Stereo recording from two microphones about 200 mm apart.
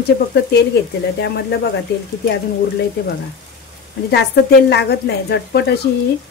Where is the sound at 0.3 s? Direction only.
55° left (ahead or behind).